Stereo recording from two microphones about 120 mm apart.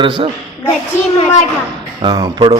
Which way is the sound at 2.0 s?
35° right (ahead or behind).